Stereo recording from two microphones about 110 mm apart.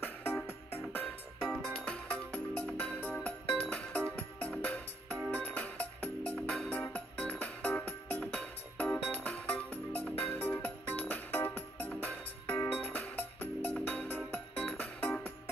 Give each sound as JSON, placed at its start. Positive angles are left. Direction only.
{"t": 0.0, "sound": "music", "side_deg": 20}
{"t": 1.5, "sound": "music", "side_deg": 5}
{"t": 5.1, "sound": "music", "side_deg": -25}
{"t": 5.4, "sound": "music", "side_deg": 15}